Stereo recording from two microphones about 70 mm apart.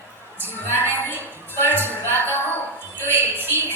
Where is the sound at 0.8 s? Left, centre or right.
Right.